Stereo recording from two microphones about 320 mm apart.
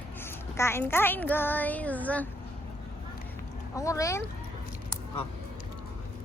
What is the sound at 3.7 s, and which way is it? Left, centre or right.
Speech, centre.